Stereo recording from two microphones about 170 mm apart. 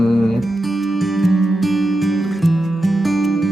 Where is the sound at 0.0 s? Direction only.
Centre (ahead or behind).